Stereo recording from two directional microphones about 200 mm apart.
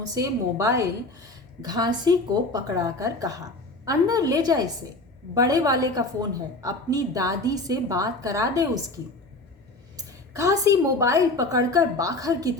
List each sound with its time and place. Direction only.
0.0 s a woman's voice: 15° right (ahead or behind)
10.0 s a woman's voice: 15° right (ahead or behind)